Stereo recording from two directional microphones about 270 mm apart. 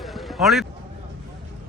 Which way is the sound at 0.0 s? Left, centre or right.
Centre.